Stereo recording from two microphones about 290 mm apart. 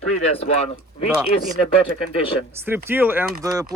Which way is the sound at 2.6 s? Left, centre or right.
Centre.